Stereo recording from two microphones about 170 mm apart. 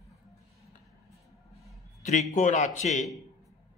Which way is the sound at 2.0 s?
45° left (ahead or behind).